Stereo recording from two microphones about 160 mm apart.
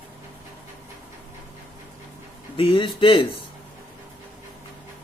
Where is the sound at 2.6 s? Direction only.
30° left (ahead or behind).